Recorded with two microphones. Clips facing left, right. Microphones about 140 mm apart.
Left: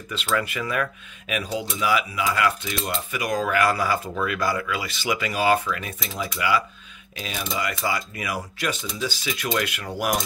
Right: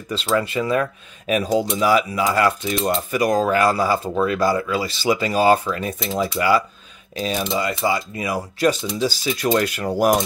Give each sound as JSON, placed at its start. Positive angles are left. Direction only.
{"t": 0.1, "sound": "speech", "side_deg": -30}